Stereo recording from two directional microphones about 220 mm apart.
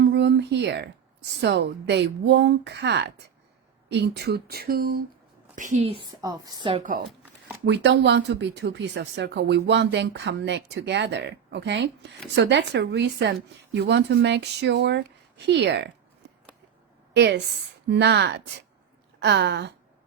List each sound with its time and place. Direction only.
0.0 s a sound: 50° right (ahead or behind)
1.4 s a woman's voice: 50° right (ahead or behind); by 6.8 s 20° right (ahead or behind)
7.6 s speech: 50° right (ahead or behind)
17.2 s speech: 50° right (ahead or behind)